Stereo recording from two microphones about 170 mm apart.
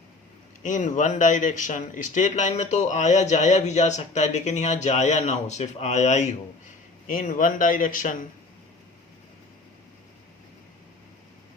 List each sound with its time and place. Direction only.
0.6 s speech: 45° left (ahead or behind)